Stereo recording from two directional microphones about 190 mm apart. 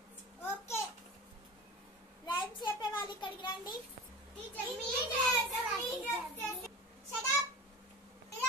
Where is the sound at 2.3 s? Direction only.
25° left (ahead or behind).